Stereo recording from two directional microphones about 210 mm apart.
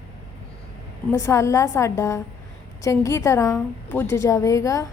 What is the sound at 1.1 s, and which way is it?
A woman's voice, 15° left (ahead or behind).